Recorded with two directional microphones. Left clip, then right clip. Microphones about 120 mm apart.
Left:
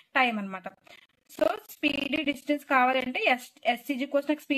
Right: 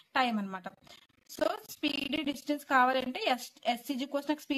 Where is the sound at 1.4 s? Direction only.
25° left (ahead or behind).